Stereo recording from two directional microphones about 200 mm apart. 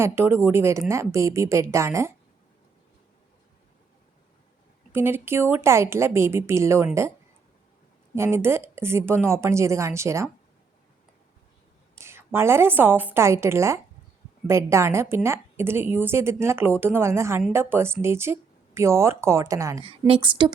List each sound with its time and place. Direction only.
0.0 s a woman's voice: 10° right (ahead or behind)
4.9 s a woman's voice: 10° right (ahead or behind)
8.1 s a woman's voice: 10° right (ahead or behind)
11.9 s a woman's voice: 10° right (ahead or behind)
19.8 s a woman's voice: 30° right (ahead or behind)